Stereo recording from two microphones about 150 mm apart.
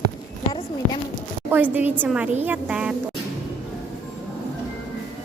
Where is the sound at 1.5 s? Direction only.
10° right (ahead or behind).